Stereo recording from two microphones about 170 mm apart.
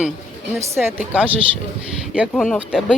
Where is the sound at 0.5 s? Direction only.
10° right (ahead or behind).